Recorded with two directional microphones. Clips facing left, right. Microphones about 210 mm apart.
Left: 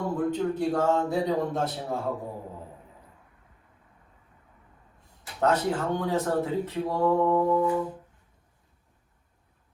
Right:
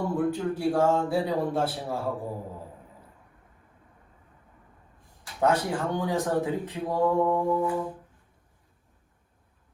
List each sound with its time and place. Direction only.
0.0 s speech: 5° right (ahead or behind)
5.4 s speech: 10° right (ahead or behind)
7.5 s brass instrument: 25° right (ahead or behind)